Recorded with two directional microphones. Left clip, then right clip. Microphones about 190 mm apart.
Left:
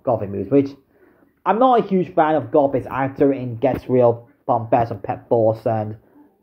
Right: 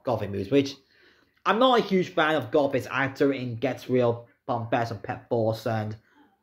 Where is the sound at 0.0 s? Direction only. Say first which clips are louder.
Left 7 dB; 25° right (ahead or behind).